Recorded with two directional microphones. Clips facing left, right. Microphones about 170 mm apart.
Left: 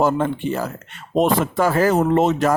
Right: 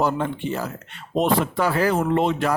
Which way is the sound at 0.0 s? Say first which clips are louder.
Left 4 dB; 45° left (ahead or behind).